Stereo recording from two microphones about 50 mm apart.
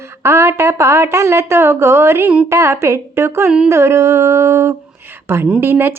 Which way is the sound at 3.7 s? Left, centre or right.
Right.